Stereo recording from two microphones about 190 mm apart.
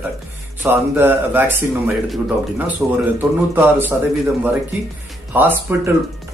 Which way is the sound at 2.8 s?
5° right (ahead or behind).